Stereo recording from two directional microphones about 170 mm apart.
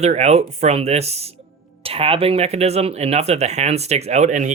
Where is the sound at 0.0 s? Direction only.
40° right (ahead or behind).